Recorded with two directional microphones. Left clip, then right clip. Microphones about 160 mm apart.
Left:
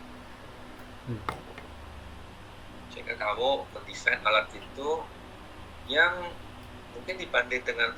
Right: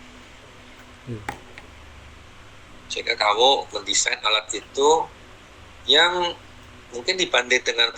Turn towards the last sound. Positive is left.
turn(degrees=-60)  # may be behind; listen again after turning